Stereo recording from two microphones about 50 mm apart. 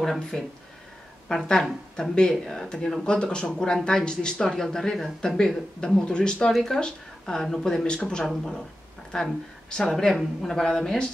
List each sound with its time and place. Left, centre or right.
0.0 s speech: centre
1.5 s speech: centre
5.4 s speech: centre